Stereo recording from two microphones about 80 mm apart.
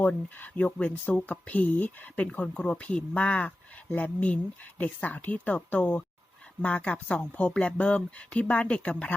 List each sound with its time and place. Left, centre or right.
0.0 s speech: centre